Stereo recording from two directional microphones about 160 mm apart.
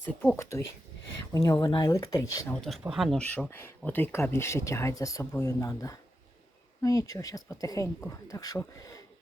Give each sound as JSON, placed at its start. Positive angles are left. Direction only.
{"t": 0.1, "sound": "speech", "side_deg": 10}
{"t": 2.5, "sound": "speech", "side_deg": 0}